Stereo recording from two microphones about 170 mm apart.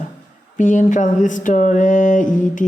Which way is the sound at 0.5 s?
50° left (ahead or behind).